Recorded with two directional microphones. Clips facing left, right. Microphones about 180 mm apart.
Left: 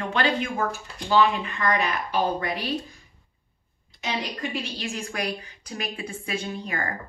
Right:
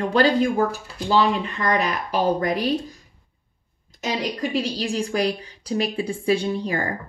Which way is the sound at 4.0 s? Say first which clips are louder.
Right 5 dB; 40° right (ahead or behind).